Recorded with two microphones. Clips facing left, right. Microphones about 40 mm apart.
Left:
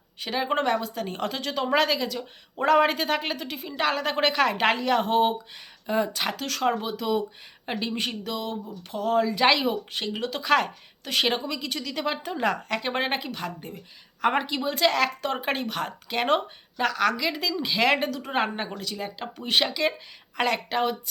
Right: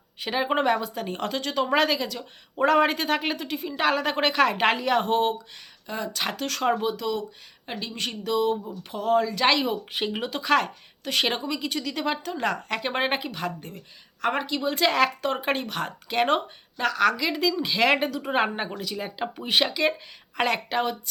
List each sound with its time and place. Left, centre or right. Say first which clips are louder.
0.2 s a woman's voice: right 1 dB; centre
5.8 s speech: left 7 dB; centre
6.1 s a woman's voice: even; centre
7.0 s speech: left 2 dB; centre
8.0 s a woman's voice: right 6 dB; centre
9.9 s a woman's voice: right 1 dB; centre